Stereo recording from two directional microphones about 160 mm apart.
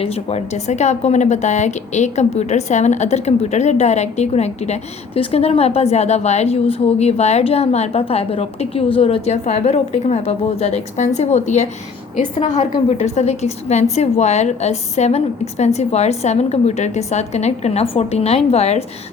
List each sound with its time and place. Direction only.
0.0 s a woman's voice: 40° left (ahead or behind)